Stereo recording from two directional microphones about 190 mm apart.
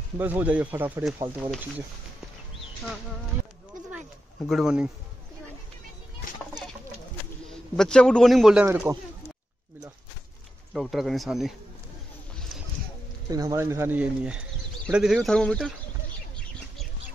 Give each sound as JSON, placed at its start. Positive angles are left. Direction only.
{"t": 0.2, "sound": "speech", "side_deg": -10}
{"t": 4.4, "sound": "speech", "side_deg": 0}
{"t": 6.2, "sound": "a sound", "side_deg": 45}
{"t": 7.4, "sound": "a man's voice", "side_deg": 5}
{"t": 8.6, "sound": "speech", "side_deg": -15}
{"t": 10.7, "sound": "speech", "side_deg": 0}
{"t": 13.3, "sound": "speech", "side_deg": -20}